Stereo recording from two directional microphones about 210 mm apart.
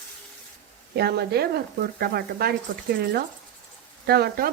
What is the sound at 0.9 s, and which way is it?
Speech, 50° right (ahead or behind).